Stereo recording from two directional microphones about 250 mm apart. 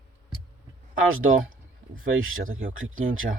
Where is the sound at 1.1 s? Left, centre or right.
Right.